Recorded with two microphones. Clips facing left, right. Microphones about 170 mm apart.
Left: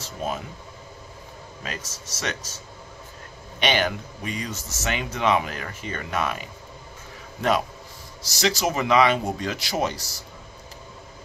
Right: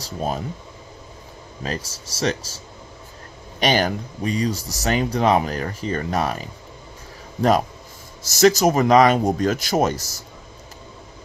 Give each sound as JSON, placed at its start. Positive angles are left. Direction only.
{"t": 0.0, "sound": "speech", "side_deg": -35}
{"t": 1.6, "sound": "speech", "side_deg": -35}
{"t": 8.3, "sound": "speech", "side_deg": -45}